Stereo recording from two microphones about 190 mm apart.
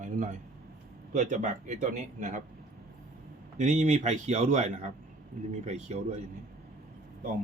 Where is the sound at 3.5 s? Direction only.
40° right (ahead or behind).